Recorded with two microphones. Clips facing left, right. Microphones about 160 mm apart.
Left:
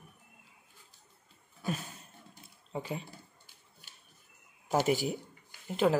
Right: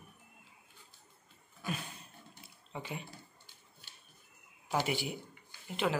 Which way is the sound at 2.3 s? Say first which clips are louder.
Left 6 dB; 35° left (ahead or behind).